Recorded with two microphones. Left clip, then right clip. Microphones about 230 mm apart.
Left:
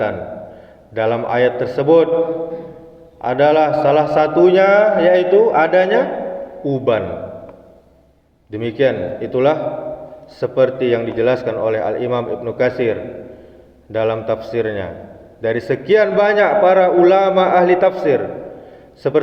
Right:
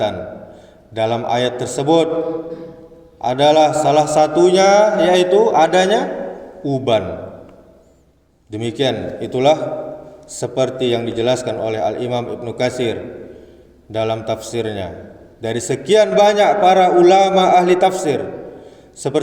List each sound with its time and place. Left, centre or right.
0.9 s a man's voice: right
3.2 s a man's voice: right
8.4 s a man's voice: right